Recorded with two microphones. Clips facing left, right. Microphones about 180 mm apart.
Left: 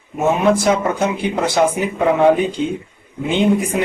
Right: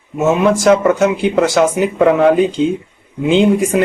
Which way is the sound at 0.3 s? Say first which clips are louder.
Right 4 dB; 90° right.